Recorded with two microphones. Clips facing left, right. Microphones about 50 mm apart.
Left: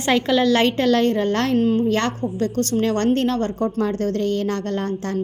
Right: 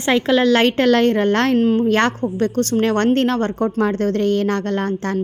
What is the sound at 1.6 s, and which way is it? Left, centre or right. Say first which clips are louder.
Speech: right 2 dB; right.